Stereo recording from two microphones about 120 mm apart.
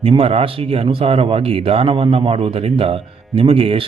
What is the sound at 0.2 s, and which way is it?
A man's voice, 55° right (ahead or behind).